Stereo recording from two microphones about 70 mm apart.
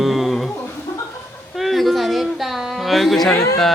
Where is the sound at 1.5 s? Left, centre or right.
Centre.